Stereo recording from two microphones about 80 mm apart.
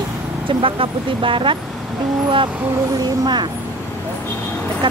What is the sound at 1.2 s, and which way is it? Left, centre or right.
Speech, right.